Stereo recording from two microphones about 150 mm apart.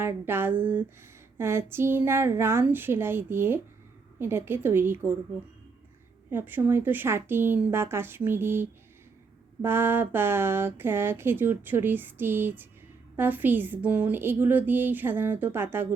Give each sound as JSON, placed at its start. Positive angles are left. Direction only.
{"t": 0.0, "sound": "speech", "side_deg": -15}
{"t": 6.3, "sound": "speech", "side_deg": -15}